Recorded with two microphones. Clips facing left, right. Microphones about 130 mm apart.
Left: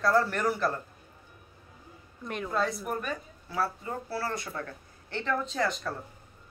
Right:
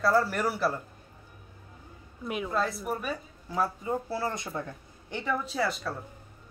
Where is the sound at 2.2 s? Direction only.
5° right (ahead or behind).